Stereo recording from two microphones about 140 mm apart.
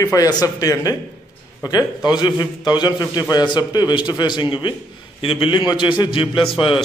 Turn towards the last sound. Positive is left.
turn(degrees=40)  # may be behind; listen again after turning